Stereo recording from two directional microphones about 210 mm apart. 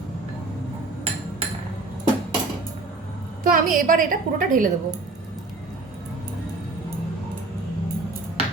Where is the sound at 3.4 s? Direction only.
40° right (ahead or behind).